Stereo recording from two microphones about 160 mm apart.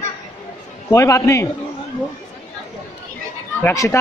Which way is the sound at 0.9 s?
20° left (ahead or behind).